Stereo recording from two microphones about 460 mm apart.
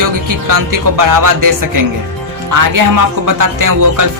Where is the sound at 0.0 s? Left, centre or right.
Right.